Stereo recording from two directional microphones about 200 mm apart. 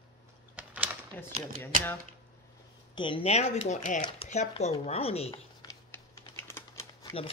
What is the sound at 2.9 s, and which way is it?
Speech, 25° left (ahead or behind).